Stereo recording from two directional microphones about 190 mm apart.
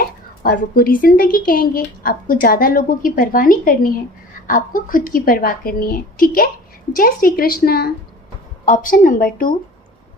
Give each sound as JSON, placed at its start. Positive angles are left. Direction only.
{"t": 0.0, "sound": "a woman's voice", "side_deg": 50}